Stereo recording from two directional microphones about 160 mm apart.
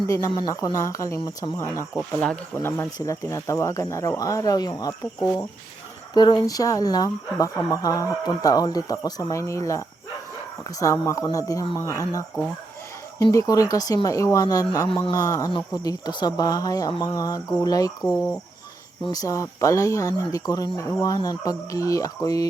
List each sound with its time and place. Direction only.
0.1 s speech: 20° left (ahead or behind)
2.1 s speech: 5° left (ahead or behind)
2.6 s speech: 15° left (ahead or behind)
6.1 s speech: 25° left (ahead or behind)
13.3 s speech: 20° left (ahead or behind)